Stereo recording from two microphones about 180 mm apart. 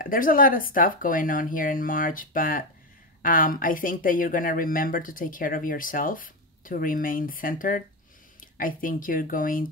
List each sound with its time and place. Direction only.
0.0 s speech: 50° left (ahead or behind)